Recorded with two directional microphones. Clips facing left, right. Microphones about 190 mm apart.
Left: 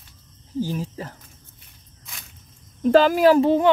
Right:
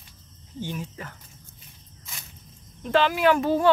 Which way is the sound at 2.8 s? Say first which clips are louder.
Left 6 dB; 40° left (ahead or behind).